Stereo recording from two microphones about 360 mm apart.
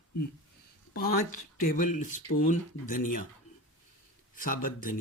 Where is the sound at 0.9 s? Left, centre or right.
Left.